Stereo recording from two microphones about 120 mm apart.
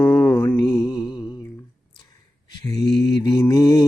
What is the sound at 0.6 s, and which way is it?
Mantra, 30° left (ahead or behind).